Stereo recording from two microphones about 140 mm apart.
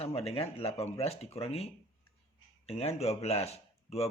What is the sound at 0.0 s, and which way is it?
Speech, 45° left (ahead or behind).